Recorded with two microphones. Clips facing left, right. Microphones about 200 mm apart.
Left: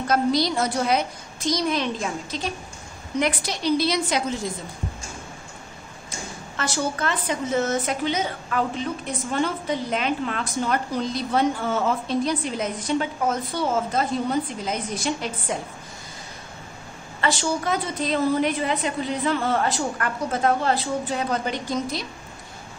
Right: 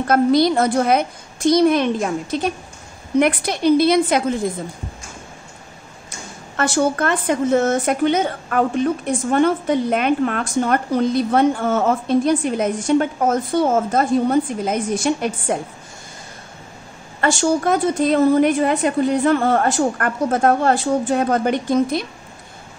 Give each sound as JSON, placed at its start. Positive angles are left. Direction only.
{"t": 0.1, "sound": "a woman's voice", "side_deg": -55}
{"t": 6.5, "sound": "a woman's voice", "side_deg": -50}
{"t": 17.2, "sound": "a woman's voice", "side_deg": -50}